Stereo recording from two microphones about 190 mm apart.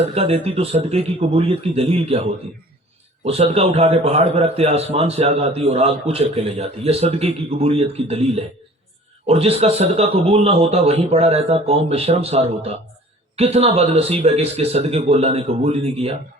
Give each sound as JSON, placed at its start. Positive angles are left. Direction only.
{"t": 0.1, "sound": "a man's voice", "side_deg": -30}